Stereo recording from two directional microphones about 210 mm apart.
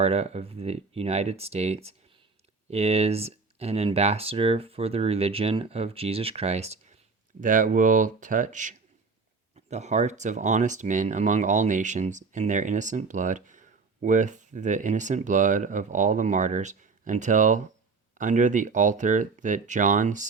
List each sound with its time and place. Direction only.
0.0 s speech: 30° right (ahead or behind)